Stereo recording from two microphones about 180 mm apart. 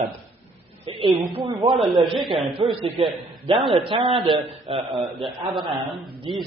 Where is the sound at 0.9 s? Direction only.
30° right (ahead or behind).